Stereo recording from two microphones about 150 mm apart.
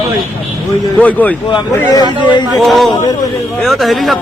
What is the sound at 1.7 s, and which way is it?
Speech, 25° left (ahead or behind).